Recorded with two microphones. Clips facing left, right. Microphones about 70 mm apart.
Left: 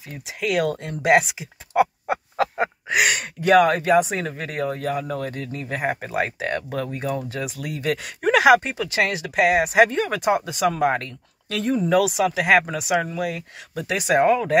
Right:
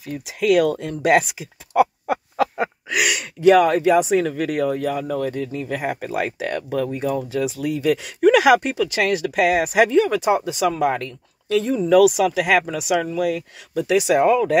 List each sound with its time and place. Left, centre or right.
0.1 s a sound: left
3.2 s speech: left
6.7 s speech: left
9.8 s speech: left
11.8 s speech: left
13.7 s speech: left